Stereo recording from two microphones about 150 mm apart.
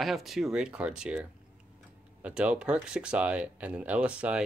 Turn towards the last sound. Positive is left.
turn(degrees=-10)  # may be behind; listen again after turning